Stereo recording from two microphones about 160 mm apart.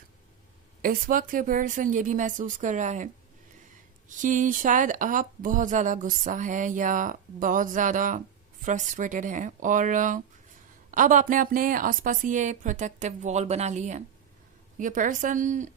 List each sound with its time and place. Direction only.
0.8 s speech: 60° right (ahead or behind)
4.2 s speech: 55° right (ahead or behind)